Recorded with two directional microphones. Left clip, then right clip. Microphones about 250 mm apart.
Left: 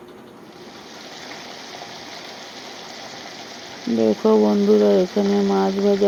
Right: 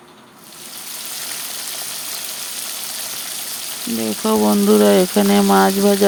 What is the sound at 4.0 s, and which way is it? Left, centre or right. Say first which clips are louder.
Speech: left 2 dB; right.